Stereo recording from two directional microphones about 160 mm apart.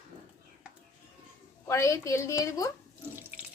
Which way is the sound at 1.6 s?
20° left (ahead or behind).